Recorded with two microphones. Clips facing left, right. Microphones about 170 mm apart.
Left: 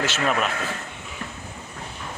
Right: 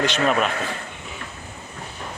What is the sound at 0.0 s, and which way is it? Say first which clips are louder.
Speech: right 3 dB; 5° left (ahead or behind).